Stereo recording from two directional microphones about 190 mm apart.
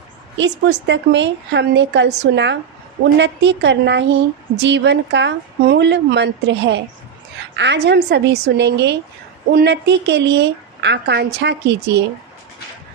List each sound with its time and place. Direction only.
0.3 s a woman's voice: 70° right (ahead or behind)